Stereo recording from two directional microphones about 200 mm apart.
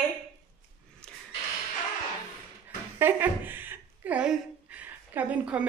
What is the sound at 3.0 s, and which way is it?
Speech, 10° right (ahead or behind).